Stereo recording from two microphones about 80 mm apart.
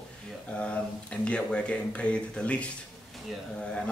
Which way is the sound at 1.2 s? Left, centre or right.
Centre.